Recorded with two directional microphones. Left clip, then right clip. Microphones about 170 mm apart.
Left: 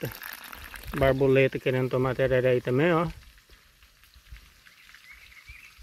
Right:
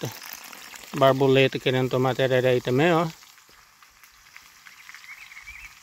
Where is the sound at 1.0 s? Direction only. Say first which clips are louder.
Right 3 dB; 25° right (ahead or behind).